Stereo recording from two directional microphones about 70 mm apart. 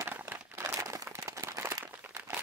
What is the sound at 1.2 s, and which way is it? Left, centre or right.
Applause, right.